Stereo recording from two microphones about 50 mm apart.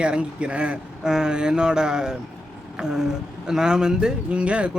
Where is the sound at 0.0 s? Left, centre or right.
Right.